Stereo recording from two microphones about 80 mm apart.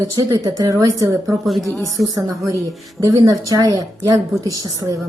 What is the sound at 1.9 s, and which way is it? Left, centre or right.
A woman's voice, right.